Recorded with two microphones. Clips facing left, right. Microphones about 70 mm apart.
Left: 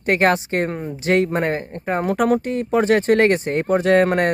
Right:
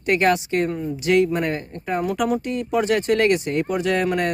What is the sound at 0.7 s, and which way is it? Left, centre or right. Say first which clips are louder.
Speech: right 1 dB; left.